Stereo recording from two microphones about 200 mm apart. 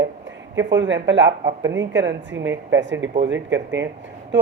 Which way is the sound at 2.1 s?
65° right (ahead or behind).